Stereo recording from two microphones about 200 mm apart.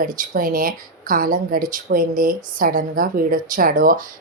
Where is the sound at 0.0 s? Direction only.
45° right (ahead or behind).